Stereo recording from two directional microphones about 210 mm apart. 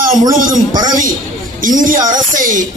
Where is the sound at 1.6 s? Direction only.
40° right (ahead or behind).